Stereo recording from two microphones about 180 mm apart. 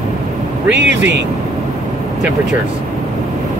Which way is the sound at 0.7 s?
75° right (ahead or behind).